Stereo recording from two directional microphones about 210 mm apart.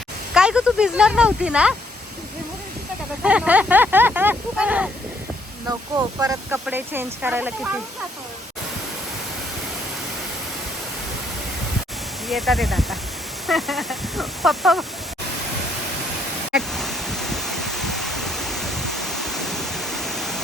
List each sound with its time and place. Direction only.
0.3 s speech: 5° right (ahead or behind)
3.2 s speech: 5° right (ahead or behind)
6.1 s speech: 10° right (ahead or behind)
12.3 s speech: centre (ahead or behind)
16.5 s a sound: centre (ahead or behind)